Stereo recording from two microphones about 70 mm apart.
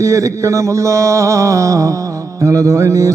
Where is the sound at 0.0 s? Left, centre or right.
Right.